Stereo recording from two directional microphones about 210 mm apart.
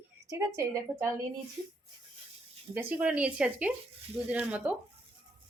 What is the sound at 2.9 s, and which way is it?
Speech, 5° right (ahead or behind).